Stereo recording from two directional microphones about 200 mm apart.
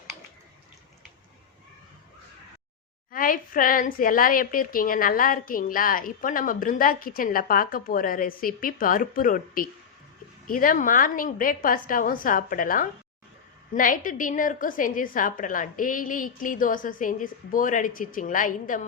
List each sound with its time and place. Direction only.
3.1 s a woman's voice: 45° left (ahead or behind)